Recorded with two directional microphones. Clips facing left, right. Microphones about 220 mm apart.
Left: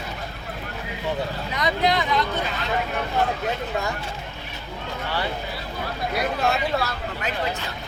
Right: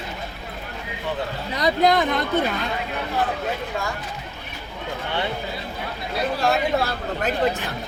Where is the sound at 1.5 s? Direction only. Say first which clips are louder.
Right 4 dB; 40° right (ahead or behind).